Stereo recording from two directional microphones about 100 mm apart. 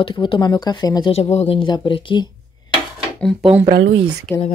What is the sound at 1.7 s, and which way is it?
Speech, 55° left (ahead or behind).